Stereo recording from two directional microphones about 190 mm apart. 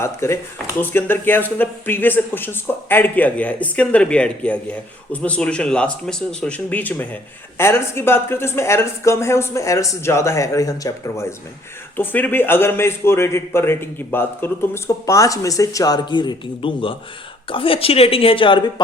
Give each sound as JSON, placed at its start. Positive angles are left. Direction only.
{"t": 0.0, "sound": "a woman's voice", "side_deg": 15}